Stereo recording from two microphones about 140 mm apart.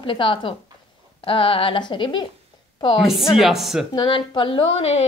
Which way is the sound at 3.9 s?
35° left (ahead or behind).